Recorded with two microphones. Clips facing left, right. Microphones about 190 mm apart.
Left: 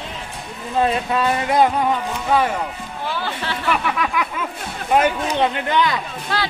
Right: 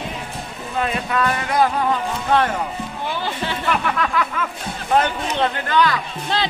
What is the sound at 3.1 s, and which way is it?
Speech, 15° right (ahead or behind).